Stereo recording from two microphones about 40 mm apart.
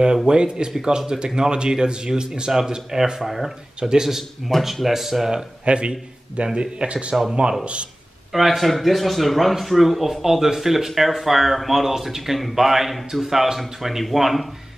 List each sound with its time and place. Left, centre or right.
0.3 s a man's voice: right
4.2 s speech: centre
5.7 s a man's voice: right
8.3 s speech: centre